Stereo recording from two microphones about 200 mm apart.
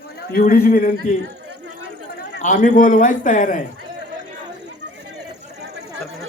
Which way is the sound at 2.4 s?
40° left (ahead or behind).